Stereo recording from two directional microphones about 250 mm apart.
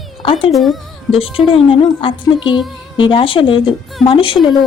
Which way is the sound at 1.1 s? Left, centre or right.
Left.